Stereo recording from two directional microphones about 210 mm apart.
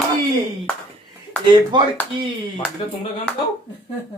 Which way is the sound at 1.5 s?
20° right (ahead or behind).